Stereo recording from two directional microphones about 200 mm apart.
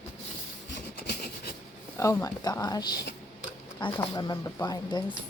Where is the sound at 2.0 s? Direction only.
15° left (ahead or behind).